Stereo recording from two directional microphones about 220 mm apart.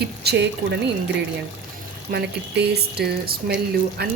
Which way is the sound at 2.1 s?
45° right (ahead or behind).